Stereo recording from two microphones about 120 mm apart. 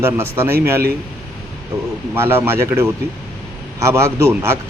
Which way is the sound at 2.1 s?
20° right (ahead or behind).